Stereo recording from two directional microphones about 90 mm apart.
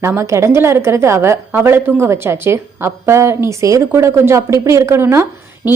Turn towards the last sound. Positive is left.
turn(degrees=-25)  # may be behind; listen again after turning